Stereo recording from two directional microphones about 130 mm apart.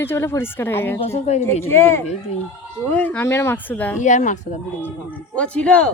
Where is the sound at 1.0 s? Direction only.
55° left (ahead or behind).